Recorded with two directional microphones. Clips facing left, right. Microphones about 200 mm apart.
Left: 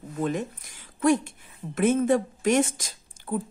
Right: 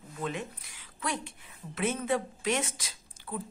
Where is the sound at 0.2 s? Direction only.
45° left (ahead or behind).